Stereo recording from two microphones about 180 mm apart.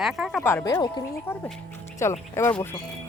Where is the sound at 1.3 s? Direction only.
10° left (ahead or behind).